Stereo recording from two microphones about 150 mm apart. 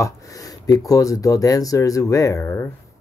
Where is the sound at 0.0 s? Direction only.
25° left (ahead or behind).